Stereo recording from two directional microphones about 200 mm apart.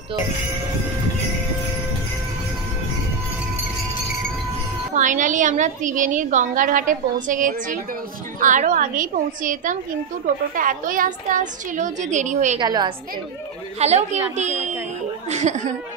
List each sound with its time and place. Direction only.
4.9 s a woman's voice: 40° right (ahead or behind)
12.5 s a woman's voice: 20° right (ahead or behind)
13.7 s a woman's voice: 30° right (ahead or behind)